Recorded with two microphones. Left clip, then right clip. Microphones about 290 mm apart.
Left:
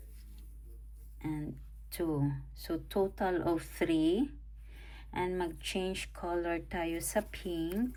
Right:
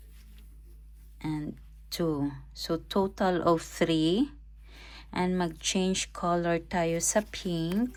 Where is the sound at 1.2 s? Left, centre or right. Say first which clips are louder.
Right 5 dB; centre.